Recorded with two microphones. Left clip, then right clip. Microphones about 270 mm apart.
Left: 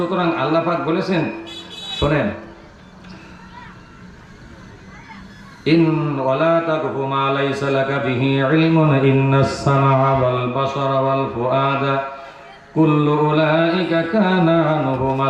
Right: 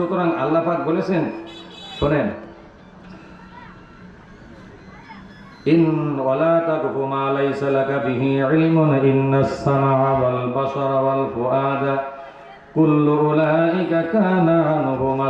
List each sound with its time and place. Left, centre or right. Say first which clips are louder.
0.0 s mantra: left 1 dB; centre
5.7 s mantra: left 1 dB; centre